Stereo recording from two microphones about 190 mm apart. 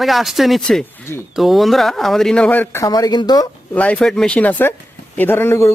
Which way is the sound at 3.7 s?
5° left (ahead or behind).